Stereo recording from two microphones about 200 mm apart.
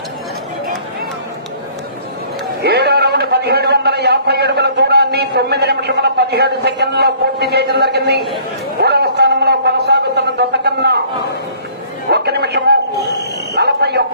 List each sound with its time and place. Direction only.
2.6 s a man's voice: 55° right (ahead or behind)
8.8 s a sound: 55° right (ahead or behind)
12.1 s a man's voice: 55° right (ahead or behind)